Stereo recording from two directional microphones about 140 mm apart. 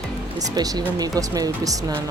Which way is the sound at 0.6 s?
30° right (ahead or behind).